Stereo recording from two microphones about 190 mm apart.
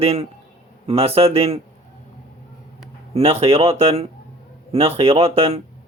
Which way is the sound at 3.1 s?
30° right (ahead or behind).